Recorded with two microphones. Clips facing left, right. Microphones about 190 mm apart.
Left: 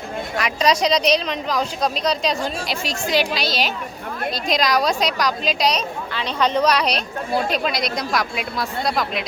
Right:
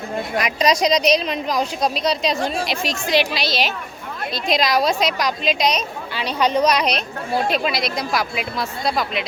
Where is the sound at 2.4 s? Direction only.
40° left (ahead or behind).